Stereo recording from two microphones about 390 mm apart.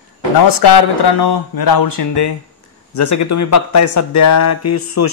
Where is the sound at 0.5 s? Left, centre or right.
Left.